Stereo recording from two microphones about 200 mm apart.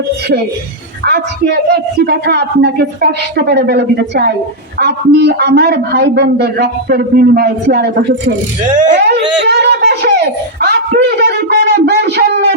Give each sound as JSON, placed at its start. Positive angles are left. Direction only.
{"t": 1.0, "sound": "a man's voice", "side_deg": -55}
{"t": 8.7, "sound": "speech", "side_deg": -40}
{"t": 9.0, "sound": "a man's voice", "side_deg": -55}
{"t": 9.5, "sound": "a sound", "side_deg": -55}